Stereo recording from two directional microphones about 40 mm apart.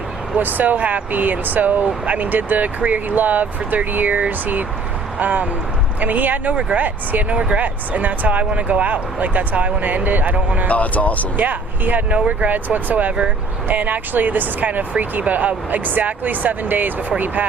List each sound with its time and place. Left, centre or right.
0.3 s speech: right
10.7 s speech: left
11.3 s speech: right